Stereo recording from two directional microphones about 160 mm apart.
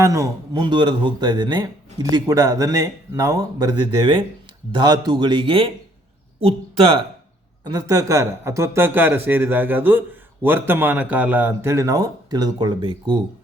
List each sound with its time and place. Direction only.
0.0 s speech: 20° right (ahead or behind); by 7.0 s 35° right (ahead or behind)
7.6 s a man's voice: 25° right (ahead or behind)